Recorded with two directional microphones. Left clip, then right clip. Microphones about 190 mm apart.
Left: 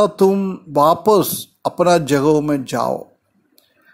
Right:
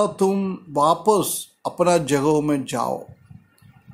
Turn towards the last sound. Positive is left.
turn(degrees=25)  # may be behind; listen again after turning